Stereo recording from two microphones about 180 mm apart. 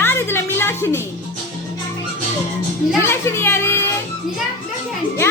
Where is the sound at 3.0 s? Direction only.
15° left (ahead or behind).